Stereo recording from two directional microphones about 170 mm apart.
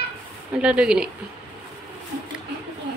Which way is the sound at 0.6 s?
5° right (ahead or behind).